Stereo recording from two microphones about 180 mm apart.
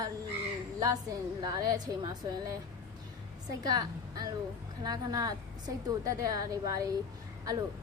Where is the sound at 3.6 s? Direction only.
20° right (ahead or behind).